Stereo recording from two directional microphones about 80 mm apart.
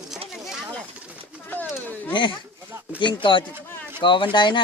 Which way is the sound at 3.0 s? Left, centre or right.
Left.